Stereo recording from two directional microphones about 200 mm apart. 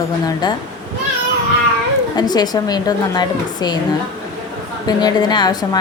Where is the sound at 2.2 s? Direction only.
20° left (ahead or behind).